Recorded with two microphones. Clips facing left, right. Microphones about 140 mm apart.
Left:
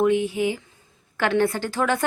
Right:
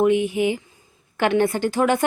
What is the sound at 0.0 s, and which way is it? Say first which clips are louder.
A woman's voice: right 2 dB; 15° right (ahead or behind).